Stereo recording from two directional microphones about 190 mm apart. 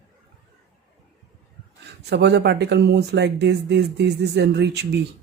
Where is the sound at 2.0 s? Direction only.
60° right (ahead or behind).